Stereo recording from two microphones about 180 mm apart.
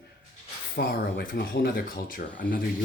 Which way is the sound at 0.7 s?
55° left (ahead or behind).